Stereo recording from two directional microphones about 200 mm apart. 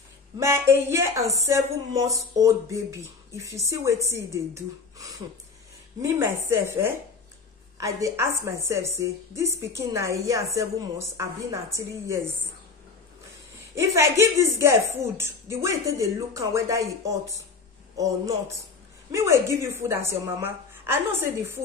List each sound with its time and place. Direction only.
0.4 s speech: 15° right (ahead or behind)
6.0 s speech: 15° right (ahead or behind)
13.7 s speech: 15° right (ahead or behind)